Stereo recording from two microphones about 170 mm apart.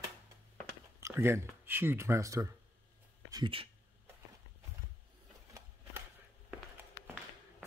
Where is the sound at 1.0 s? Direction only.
15° right (ahead or behind).